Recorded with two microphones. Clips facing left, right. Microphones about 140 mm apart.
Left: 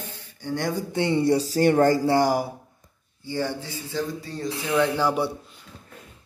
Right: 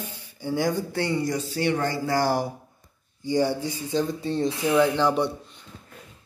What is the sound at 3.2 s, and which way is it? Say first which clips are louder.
Speech: right 5 dB; 15° right (ahead or behind).